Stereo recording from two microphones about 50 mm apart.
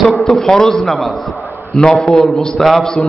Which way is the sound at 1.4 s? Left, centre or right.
Centre.